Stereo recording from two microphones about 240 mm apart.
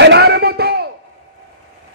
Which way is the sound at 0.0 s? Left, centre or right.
Right.